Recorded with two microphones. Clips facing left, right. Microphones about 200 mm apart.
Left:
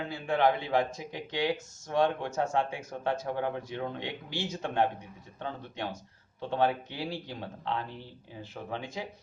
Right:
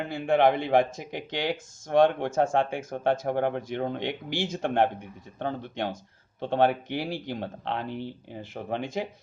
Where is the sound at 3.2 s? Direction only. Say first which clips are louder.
Right 5 dB; 65° right (ahead or behind); by 4.5 s 80° right.